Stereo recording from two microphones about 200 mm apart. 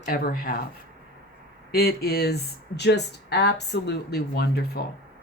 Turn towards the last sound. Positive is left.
turn(degrees=50)  # may be behind; listen again after turning